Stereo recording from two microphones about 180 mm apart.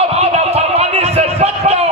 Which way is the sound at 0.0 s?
35° right (ahead or behind).